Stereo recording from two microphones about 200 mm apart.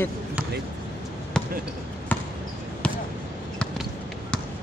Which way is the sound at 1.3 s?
5° left (ahead or behind).